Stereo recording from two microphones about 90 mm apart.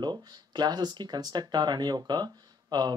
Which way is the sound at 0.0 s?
55° right (ahead or behind).